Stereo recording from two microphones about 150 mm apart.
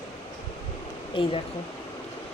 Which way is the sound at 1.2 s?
35° left (ahead or behind).